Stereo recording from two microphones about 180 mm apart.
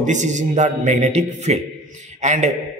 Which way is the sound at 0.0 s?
40° right (ahead or behind).